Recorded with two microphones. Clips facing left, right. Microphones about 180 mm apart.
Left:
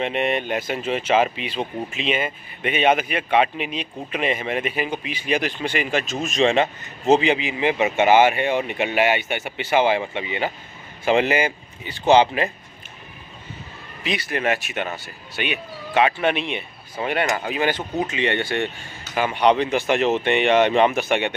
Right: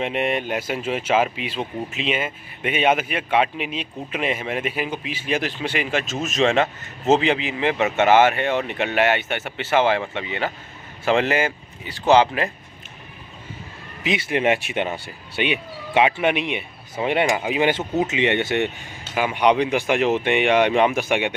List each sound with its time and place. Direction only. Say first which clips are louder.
0.0 s speech: even; 5° right (ahead or behind)
14.0 s speech: right 3 dB; 20° right (ahead or behind)
17.6 s speech: right 2 dB; 25° right (ahead or behind)